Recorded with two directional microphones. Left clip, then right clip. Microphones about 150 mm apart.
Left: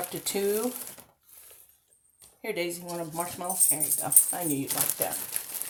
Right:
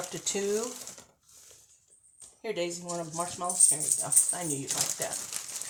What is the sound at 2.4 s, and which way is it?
Speech, 45° left (ahead or behind).